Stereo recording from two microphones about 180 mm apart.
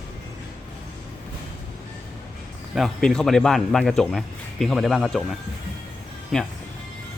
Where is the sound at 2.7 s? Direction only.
Centre (ahead or behind).